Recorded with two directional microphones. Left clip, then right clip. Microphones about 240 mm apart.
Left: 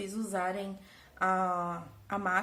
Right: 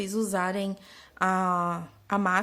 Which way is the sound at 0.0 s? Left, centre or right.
Right.